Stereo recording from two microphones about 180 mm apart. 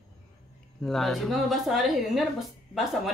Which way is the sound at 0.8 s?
Centre (ahead or behind).